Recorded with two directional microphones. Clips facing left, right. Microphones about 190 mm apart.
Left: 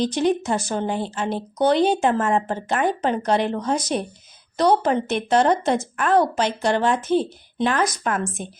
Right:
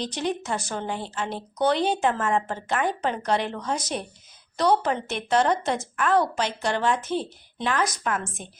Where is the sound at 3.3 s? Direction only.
20° left (ahead or behind).